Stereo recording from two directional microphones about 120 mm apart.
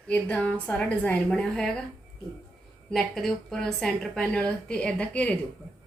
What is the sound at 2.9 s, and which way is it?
A woman's voice, centre (ahead or behind).